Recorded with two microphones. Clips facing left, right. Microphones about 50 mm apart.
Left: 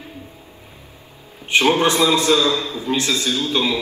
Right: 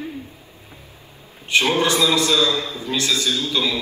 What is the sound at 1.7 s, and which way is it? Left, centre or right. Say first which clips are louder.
Speech: left 4 dB; left.